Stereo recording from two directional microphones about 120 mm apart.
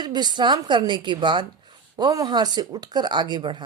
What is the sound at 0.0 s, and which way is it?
A woman's voice, 35° right (ahead or behind).